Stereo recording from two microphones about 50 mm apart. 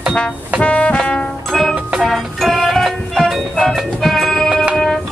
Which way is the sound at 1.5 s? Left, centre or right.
Centre.